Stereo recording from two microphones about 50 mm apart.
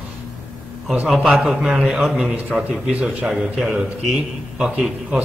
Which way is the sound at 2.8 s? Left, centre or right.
Centre.